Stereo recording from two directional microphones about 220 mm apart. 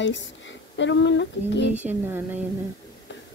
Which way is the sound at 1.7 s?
10° right (ahead or behind).